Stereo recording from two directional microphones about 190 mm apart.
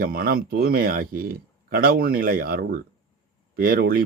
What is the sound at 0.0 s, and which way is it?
Speech, 50° right (ahead or behind).